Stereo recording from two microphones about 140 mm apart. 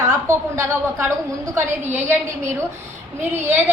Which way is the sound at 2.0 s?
20° right (ahead or behind).